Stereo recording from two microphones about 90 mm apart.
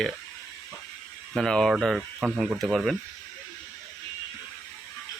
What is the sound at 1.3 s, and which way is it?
Speech, 5° left (ahead or behind).